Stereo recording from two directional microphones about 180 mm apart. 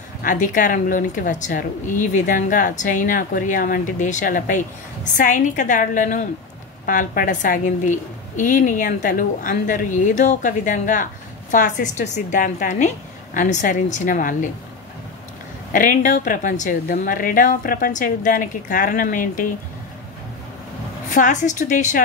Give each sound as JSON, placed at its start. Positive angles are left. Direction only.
{"t": 0.2, "sound": "a woman's voice", "side_deg": 45}
{"t": 15.7, "sound": "a woman's voice", "side_deg": 45}
{"t": 21.1, "sound": "a woman's voice", "side_deg": 45}